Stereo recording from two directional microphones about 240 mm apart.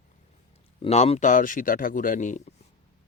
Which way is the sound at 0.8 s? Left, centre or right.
Left.